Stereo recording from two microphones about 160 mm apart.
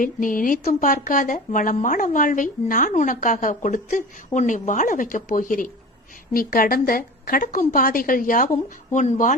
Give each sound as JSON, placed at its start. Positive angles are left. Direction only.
{"t": 0.0, "sound": "speech", "side_deg": 55}